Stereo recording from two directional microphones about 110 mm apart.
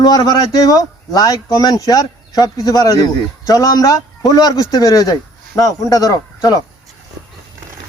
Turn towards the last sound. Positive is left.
turn(degrees=30)  # may be behind; listen again after turning